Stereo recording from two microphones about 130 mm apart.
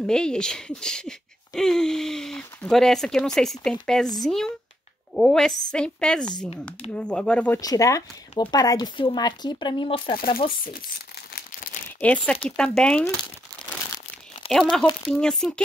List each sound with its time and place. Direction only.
0.0 s speech: 5° left (ahead or behind)
5.1 s speech: centre (ahead or behind)
7.6 s speech: 25° left (ahead or behind); by 10.3 s 40° left (ahead or behind)
12.0 s speech: 10° left (ahead or behind)
14.5 s speech: 5° left (ahead or behind)